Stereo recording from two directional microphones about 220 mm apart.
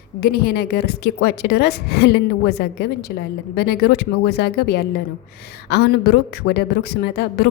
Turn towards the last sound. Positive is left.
turn(degrees=45)  # may be behind; listen again after turning